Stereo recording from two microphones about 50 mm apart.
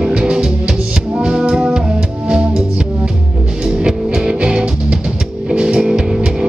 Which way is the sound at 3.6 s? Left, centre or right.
Centre.